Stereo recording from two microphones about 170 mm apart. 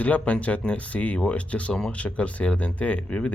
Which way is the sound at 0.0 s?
10° left (ahead or behind).